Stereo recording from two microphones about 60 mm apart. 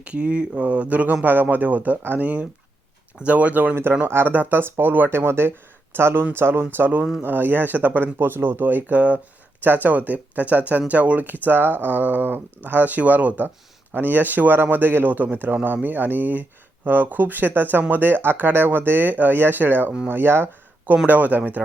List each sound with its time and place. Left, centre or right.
0.0 s speech: centre
4.0 s speech: right
21.1 s speech: right